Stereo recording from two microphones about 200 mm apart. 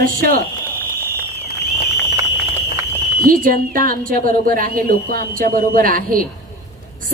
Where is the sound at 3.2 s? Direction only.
45° right (ahead or behind).